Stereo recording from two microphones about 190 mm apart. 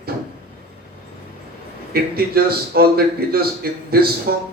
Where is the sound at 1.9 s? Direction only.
55° right (ahead or behind).